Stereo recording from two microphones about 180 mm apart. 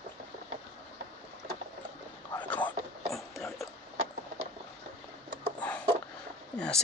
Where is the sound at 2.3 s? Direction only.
10° left (ahead or behind).